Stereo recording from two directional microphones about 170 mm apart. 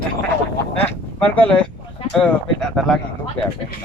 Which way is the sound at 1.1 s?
10° left (ahead or behind).